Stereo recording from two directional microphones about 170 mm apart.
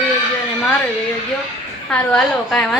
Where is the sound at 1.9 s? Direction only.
5° left (ahead or behind).